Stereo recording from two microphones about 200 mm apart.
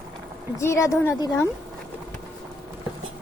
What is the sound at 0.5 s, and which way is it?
Speech, 15° left (ahead or behind).